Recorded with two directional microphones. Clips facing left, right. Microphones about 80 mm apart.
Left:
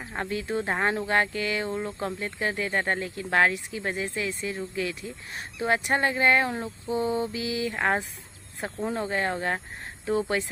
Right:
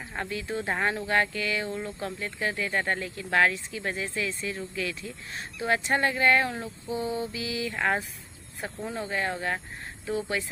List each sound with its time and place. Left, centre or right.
0.2 s mantra: left
0.6 s speech: left
6.8 s mantra: left